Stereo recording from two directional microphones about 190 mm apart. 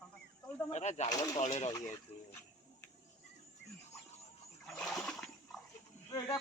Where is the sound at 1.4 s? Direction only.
35° left (ahead or behind).